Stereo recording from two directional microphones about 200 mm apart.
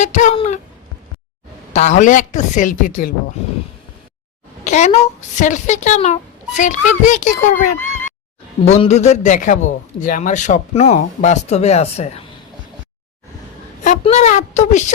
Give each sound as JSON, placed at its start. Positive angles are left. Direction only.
{"t": 0.0, "sound": "a man's voice", "side_deg": 35}
{"t": 1.7, "sound": "a man's voice", "side_deg": 35}
{"t": 4.6, "sound": "a man's voice", "side_deg": 35}
{"t": 13.8, "sound": "a man's voice", "side_deg": 35}